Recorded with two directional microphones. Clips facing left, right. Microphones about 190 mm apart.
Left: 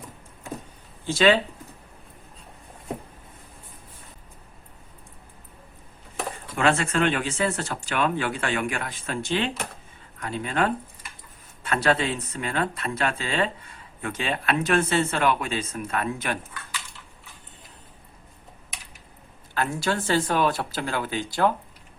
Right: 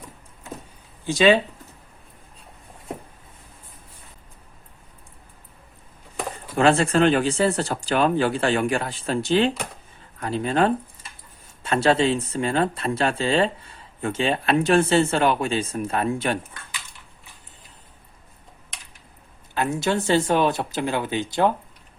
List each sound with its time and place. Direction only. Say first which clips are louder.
1.0 s speech: right 2 dB; 15° right (ahead or behind)
6.6 s speech: right 5 dB; 35° right (ahead or behind)
19.5 s speech: right 3 dB; 20° right (ahead or behind)